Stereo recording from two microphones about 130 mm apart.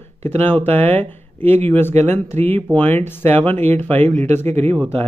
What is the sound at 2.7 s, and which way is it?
Speech, 15° left (ahead or behind).